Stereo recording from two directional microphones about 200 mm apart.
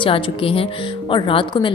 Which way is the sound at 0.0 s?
25° left (ahead or behind).